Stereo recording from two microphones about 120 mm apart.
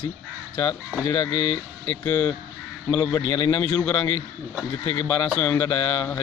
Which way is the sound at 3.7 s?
10° left (ahead or behind).